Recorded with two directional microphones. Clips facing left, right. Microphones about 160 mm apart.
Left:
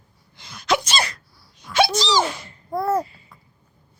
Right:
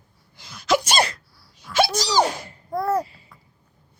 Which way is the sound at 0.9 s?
40° right (ahead or behind).